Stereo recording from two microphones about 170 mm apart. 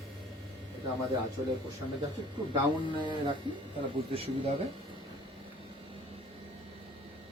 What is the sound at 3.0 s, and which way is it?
A woman's voice, 25° right (ahead or behind).